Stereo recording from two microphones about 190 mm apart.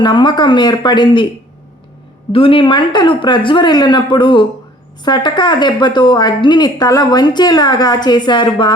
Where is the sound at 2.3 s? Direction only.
30° left (ahead or behind).